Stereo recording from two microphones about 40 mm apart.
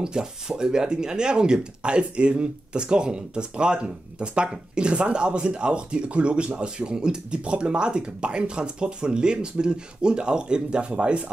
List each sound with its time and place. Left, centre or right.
0.0 s speech: centre